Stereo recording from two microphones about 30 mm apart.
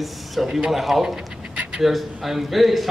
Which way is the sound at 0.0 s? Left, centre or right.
Centre.